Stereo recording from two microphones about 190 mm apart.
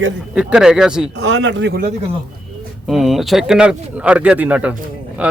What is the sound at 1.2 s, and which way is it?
Speech, 70° right (ahead or behind).